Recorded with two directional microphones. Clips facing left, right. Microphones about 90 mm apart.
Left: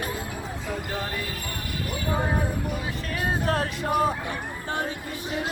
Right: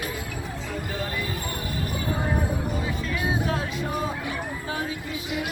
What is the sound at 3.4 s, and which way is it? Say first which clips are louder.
Music: left 2 dB; 60° left (ahead or behind).